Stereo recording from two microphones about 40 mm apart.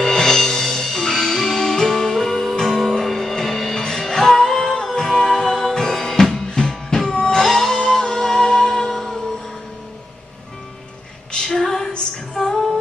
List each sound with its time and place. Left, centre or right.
0.0 s music: centre
11.3 s a sound: centre
11.9 s female singing: left